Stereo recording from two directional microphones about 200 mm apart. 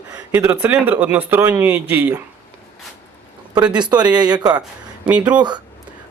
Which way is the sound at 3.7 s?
20° right (ahead or behind).